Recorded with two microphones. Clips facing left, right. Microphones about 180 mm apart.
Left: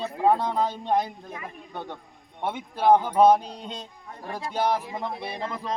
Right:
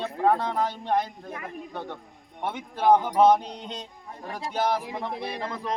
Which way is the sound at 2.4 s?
10° left (ahead or behind).